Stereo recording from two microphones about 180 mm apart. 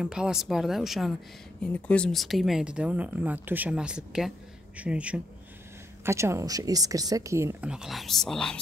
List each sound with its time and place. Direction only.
0.0 s speech: 5° right (ahead or behind)
7.7 s speech: centre (ahead or behind)